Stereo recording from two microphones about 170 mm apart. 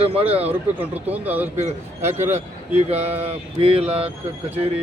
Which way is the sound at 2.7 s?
40° right (ahead or behind).